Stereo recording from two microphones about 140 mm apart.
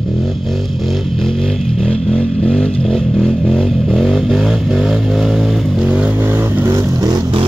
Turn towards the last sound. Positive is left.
turn(degrees=-35)  # may be behind; listen again after turning